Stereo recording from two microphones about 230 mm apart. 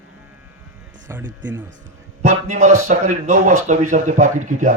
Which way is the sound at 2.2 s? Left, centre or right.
Right.